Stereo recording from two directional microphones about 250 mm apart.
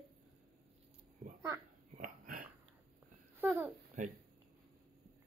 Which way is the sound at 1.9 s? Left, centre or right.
Right.